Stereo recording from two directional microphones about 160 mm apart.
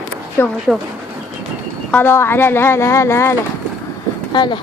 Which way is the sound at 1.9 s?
15° left (ahead or behind).